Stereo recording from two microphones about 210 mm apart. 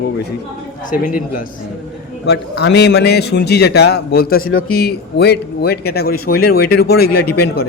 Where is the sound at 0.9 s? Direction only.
40° left (ahead or behind).